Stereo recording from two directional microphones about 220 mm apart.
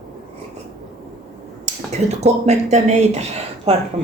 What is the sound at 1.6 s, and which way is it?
Speech, 30° right (ahead or behind).